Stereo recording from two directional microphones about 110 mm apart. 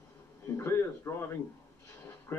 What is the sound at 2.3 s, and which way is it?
Speech, 25° left (ahead or behind).